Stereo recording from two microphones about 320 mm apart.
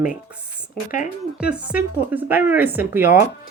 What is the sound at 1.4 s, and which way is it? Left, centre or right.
Speech, centre.